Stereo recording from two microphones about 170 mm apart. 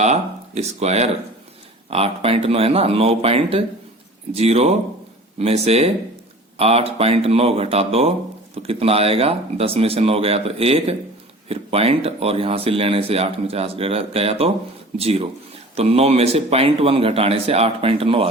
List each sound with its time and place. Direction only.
0.0 s speech: 40° right (ahead or behind)